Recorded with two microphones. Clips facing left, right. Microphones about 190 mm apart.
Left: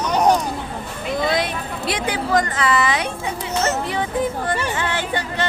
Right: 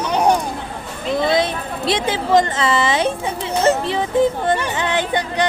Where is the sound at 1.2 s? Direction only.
25° right (ahead or behind).